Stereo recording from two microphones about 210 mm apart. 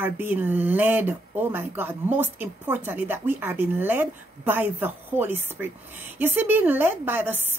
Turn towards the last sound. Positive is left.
turn(degrees=-10)  # may be behind; listen again after turning